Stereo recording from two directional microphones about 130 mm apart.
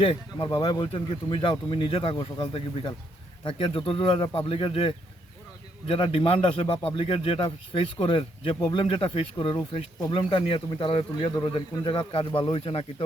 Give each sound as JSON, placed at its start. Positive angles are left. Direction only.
{"t": 0.0, "sound": "speech", "side_deg": 45}